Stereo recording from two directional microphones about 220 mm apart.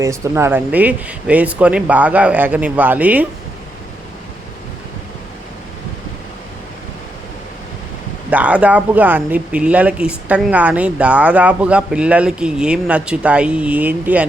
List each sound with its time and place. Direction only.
0.0 s speech: 10° right (ahead or behind)
8.3 s speech: 5° right (ahead or behind)